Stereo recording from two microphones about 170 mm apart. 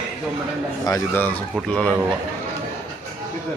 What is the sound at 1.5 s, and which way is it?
Speech, centre (ahead or behind).